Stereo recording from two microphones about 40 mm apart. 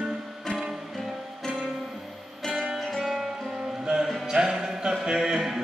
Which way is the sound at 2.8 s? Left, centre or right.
Centre.